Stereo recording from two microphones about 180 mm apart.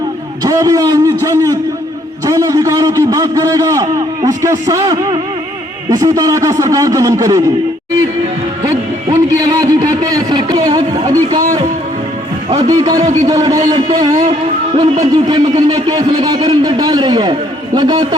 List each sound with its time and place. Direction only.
0.4 s a man's voice: 20° right (ahead or behind)
9.0 s a sound: 20° right (ahead or behind)
12.5 s music: 25° right (ahead or behind)
13.2 s a man's voice: 25° right (ahead or behind)